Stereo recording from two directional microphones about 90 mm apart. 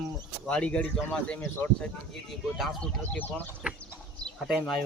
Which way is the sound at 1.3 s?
20° left (ahead or behind).